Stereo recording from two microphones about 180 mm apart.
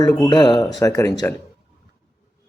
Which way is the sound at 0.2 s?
25° left (ahead or behind).